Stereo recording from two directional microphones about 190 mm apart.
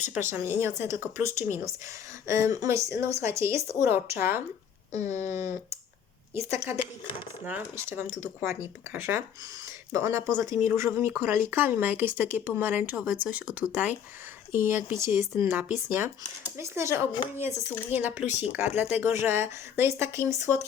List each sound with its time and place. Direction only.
0.1 s speech: 10° right (ahead or behind)
18.3 s speech: 35° left (ahead or behind)
18.5 s speech: 10° right (ahead or behind)